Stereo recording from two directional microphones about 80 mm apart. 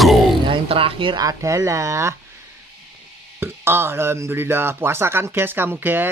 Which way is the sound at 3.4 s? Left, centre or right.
Right.